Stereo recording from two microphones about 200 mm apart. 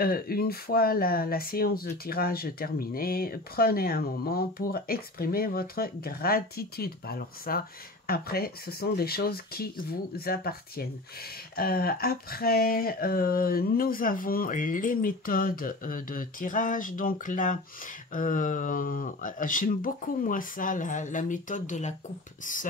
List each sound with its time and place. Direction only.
0.0 s speech: 50° left (ahead or behind)